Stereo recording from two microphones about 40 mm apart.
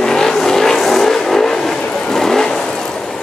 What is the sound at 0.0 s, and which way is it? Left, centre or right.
Vehicle, centre.